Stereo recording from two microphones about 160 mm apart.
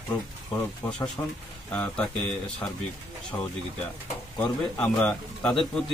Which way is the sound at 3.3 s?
20° left (ahead or behind).